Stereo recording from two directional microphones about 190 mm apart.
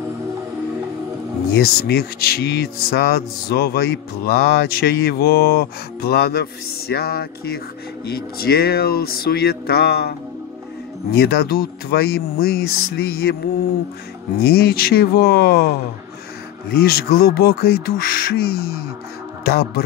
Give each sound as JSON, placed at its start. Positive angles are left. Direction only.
{"t": 1.5, "sound": "speech", "side_deg": 55}
{"t": 14.4, "sound": "speech", "side_deg": 55}
{"t": 16.7, "sound": "speech", "side_deg": 55}